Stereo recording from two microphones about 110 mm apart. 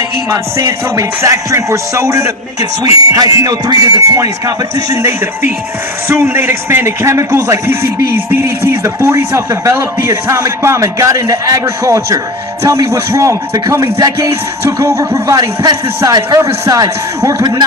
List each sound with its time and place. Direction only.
0.3 s a man's voice: 25° right (ahead or behind)